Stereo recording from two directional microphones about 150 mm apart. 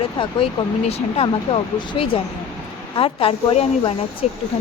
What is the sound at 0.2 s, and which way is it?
Speech, 35° left (ahead or behind).